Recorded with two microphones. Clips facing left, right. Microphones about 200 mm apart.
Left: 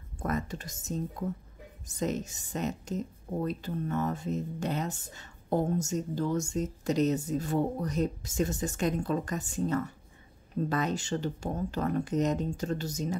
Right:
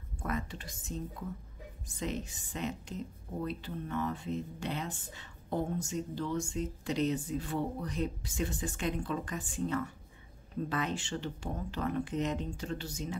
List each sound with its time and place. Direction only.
0.2 s a woman's voice: 45° left (ahead or behind)